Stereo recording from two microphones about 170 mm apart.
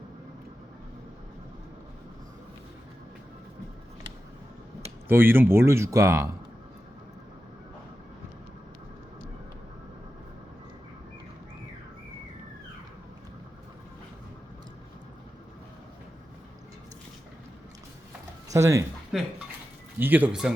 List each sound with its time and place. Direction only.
5.0 s speech: 10° right (ahead or behind)
18.5 s speech: 20° right (ahead or behind)
19.1 s speech: centre (ahead or behind)